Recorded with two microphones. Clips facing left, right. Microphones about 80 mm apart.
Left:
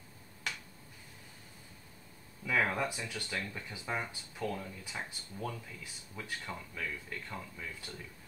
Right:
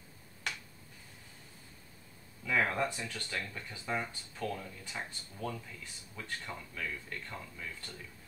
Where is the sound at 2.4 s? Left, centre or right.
Centre.